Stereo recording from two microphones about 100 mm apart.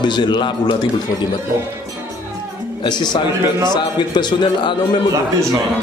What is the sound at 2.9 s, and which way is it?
Speech, 45° left (ahead or behind).